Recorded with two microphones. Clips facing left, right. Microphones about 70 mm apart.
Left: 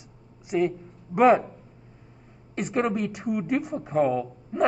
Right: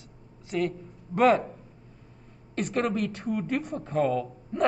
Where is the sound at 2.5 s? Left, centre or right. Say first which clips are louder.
Left 2 dB; centre.